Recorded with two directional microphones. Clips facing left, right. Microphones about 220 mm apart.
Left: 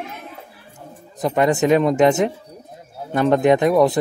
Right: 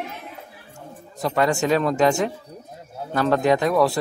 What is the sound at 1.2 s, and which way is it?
A man's voice, 20° left (ahead or behind).